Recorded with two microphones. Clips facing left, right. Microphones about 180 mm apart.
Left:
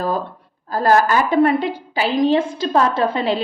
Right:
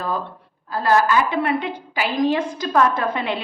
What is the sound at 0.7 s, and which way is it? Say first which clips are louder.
A woman's voice: left 2 dB; 40° left (ahead or behind).